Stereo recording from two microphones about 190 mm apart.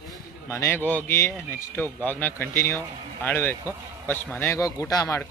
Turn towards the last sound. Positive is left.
turn(degrees=15)  # may be behind; listen again after turning